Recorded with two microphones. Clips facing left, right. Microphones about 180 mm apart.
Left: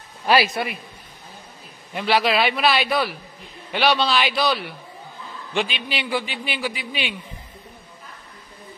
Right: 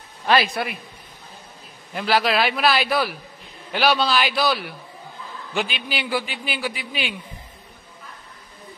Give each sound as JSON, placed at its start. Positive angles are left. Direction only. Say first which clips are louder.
{"t": 0.3, "sound": "a man's voice", "louder": "left 1 dB", "side_deg": 5}
{"t": 2.0, "sound": "a man's voice", "louder": "left 1 dB", "side_deg": 0}